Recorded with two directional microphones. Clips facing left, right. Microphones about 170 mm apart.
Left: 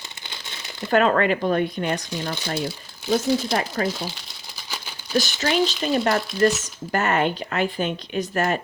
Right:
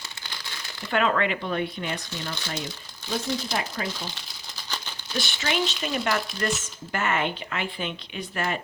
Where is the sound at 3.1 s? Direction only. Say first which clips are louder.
Left 8 dB; 45° left (ahead or behind).